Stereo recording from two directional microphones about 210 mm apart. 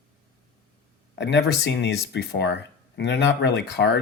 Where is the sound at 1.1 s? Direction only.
55° left (ahead or behind).